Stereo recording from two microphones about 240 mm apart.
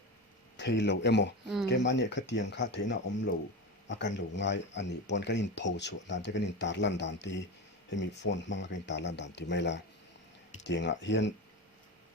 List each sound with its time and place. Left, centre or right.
0.5 s speech: left